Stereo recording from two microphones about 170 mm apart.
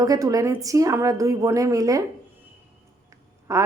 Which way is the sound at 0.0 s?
20° right (ahead or behind).